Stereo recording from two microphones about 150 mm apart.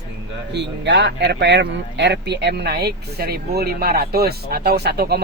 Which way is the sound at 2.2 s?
90° right.